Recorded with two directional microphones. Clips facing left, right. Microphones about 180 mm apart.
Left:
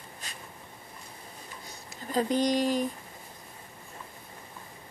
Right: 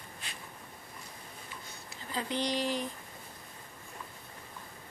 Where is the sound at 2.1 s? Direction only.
45° left (ahead or behind).